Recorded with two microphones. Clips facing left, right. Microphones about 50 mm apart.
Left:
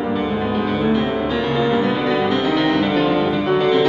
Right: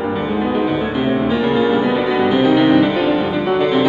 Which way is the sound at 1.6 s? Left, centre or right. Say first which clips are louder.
Right 2 dB; centre.